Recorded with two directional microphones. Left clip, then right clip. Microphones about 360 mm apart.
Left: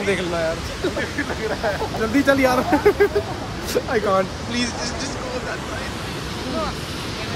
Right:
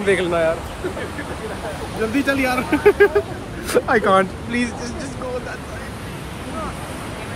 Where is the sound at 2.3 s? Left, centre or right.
Centre.